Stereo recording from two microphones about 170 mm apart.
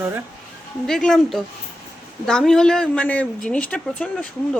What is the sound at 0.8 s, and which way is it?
Speech, 5° left (ahead or behind).